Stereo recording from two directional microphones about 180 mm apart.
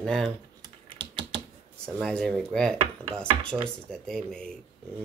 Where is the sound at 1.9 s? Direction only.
5° left (ahead or behind).